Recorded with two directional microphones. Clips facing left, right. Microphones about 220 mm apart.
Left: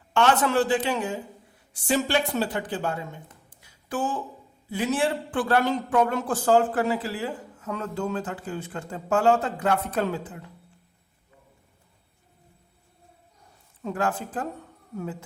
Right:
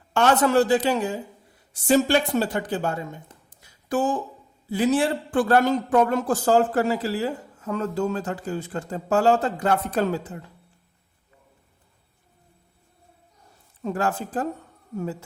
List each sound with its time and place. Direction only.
0.1 s a man's voice: 40° right (ahead or behind)
3.2 s a sound: 40° right (ahead or behind)
4.7 s a man's voice: 35° right (ahead or behind)
13.8 s a man's voice: 40° right (ahead or behind)